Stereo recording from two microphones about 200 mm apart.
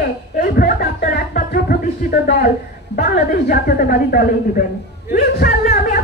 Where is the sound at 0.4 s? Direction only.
50° left (ahead or behind).